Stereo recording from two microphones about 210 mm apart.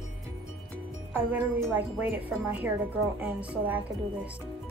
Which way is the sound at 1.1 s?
10° right (ahead or behind).